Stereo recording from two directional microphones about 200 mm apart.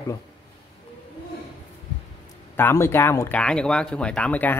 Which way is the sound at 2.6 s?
10° left (ahead or behind).